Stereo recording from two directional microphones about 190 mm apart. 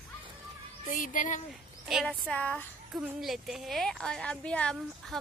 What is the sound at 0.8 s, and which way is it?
Speech, 45° left (ahead or behind).